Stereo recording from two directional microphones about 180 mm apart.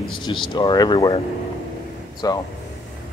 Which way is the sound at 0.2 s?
25° left (ahead or behind).